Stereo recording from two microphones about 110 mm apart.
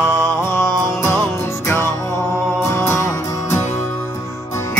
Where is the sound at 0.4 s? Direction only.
25° left (ahead or behind).